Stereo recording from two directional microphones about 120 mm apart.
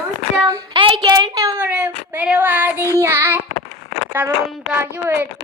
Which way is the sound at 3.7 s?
80° left.